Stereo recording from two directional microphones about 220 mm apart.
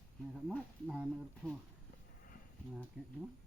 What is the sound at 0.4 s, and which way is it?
Speech, 5° right (ahead or behind).